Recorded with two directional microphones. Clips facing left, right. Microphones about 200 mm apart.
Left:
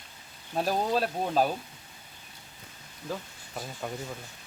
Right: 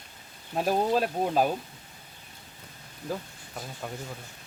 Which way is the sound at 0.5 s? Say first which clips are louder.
Right 2 dB; 10° right (ahead or behind).